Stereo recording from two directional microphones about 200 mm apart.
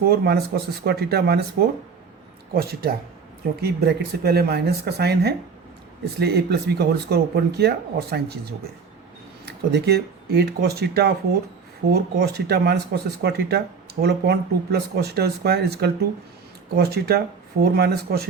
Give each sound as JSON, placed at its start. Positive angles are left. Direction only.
{"t": 0.0, "sound": "speech", "side_deg": -50}
{"t": 2.5, "sound": "speech", "side_deg": -50}